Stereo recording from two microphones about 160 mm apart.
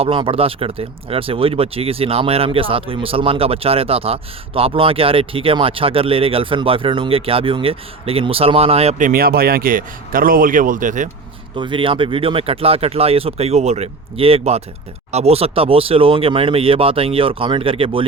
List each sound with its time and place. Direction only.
0.0 s speech: 35° right (ahead or behind)
9.0 s speech: 60° right (ahead or behind)
11.5 s speech: 30° right (ahead or behind)